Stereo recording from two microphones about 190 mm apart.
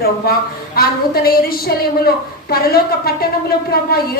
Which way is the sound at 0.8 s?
50° left (ahead or behind).